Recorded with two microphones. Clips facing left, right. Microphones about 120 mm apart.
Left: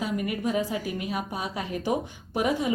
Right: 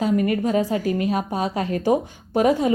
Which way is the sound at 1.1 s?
35° right (ahead or behind).